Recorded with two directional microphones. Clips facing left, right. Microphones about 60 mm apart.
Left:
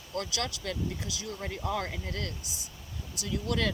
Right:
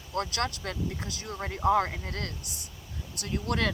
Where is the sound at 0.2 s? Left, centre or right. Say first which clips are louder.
Right 4 dB; right.